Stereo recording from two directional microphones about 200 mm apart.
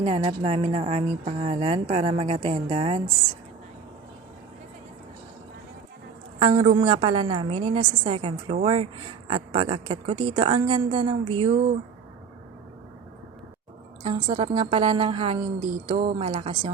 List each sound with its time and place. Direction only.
0.0 s a woman's voice: 30° right (ahead or behind)
6.4 s a woman's voice: 25° right (ahead or behind)
14.0 s a woman's voice: 25° right (ahead or behind)